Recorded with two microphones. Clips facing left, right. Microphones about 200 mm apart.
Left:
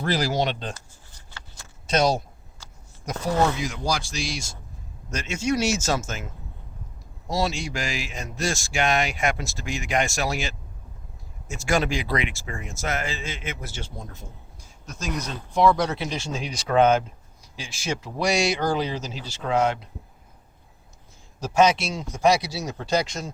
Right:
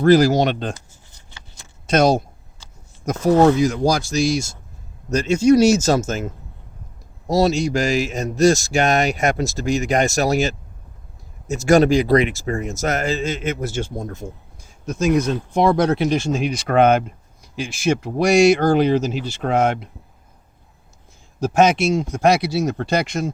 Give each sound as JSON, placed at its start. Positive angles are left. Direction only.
{"t": 0.0, "sound": "speech", "side_deg": -45}
{"t": 1.3, "sound": "keys jangling", "side_deg": -20}
{"t": 1.9, "sound": "a man's voice", "side_deg": -50}
{"t": 7.3, "sound": "a man's voice", "side_deg": -40}
{"t": 21.4, "sound": "speech", "side_deg": -50}